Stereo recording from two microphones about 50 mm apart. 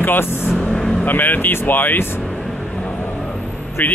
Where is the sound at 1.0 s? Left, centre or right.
Left.